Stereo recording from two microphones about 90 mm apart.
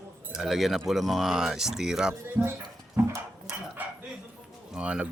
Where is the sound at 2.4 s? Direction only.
30° right (ahead or behind).